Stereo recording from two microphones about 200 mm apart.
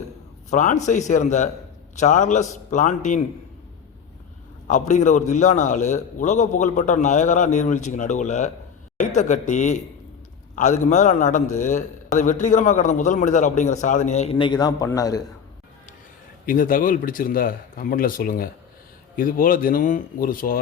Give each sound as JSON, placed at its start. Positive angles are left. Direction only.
{"t": 0.5, "sound": "a man's voice", "side_deg": 35}
{"t": 4.7, "sound": "a man's voice", "side_deg": 35}
{"t": 16.5, "sound": "a man's voice", "side_deg": 45}